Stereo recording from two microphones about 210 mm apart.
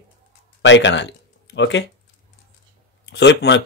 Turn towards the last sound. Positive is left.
turn(degrees=55)  # may be behind; listen again after turning